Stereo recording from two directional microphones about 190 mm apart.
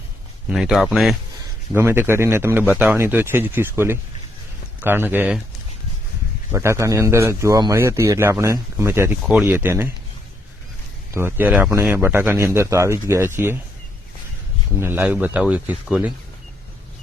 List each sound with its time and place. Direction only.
0.5 s speech: 5° right (ahead or behind)
1.7 s a man's voice: 10° right (ahead or behind)
6.5 s a man's voice: 15° right (ahead or behind)
11.1 s a man's voice: 10° right (ahead or behind)
14.8 s a man's voice: 10° right (ahead or behind)